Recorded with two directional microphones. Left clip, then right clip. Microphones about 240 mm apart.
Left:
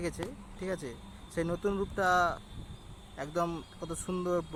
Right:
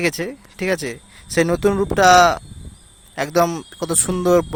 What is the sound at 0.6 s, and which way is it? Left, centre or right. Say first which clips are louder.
Speech: right 16 dB; right.